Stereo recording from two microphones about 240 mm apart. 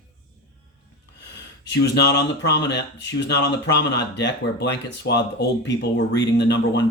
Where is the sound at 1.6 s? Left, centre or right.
Left.